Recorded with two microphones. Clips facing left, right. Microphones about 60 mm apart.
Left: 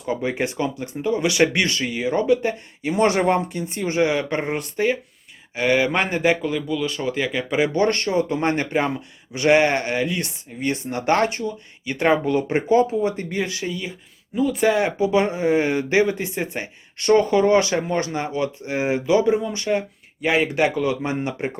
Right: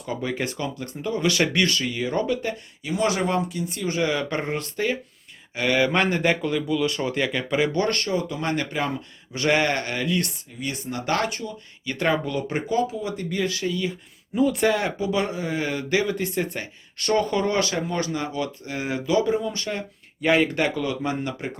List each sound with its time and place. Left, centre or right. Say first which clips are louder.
0.1 s speech: left 4 dB; left
2.4 s speech: left 5 dB; left
3.0 s speech: left 5 dB; left; by 7.7 s centre
7.7 s speech: left 4 dB; left
10.6 s speech: left 5 dB; left; by 13.9 s centre
14.3 s speech: left 1 dB; centre
14.7 s speech: left 5 dB; centre